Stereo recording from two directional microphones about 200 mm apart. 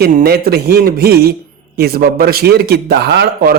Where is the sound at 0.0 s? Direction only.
50° right (ahead or behind).